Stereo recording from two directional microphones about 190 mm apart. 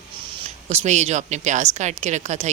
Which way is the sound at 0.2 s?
30° right (ahead or behind).